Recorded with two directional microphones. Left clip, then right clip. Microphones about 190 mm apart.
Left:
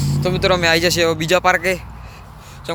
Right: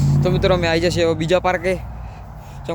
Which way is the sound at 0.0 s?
5° right (ahead or behind).